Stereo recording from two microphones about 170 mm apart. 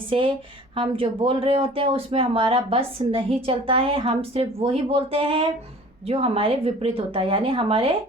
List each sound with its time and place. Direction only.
0.1 s speech: 30° right (ahead or behind)